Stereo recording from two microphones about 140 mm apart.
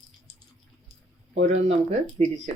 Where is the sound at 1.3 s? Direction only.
55° right (ahead or behind).